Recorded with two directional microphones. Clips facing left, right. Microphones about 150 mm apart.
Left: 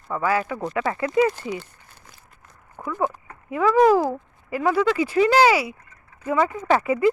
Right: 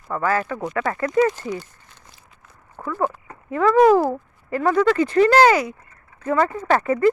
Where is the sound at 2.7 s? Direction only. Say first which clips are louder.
Right 1 dB; 15° left (ahead or behind).